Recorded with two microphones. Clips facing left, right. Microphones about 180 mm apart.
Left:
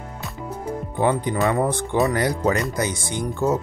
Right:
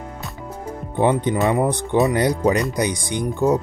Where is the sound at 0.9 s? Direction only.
20° right (ahead or behind).